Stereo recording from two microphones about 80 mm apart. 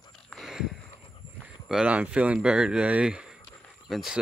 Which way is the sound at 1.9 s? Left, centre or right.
Centre.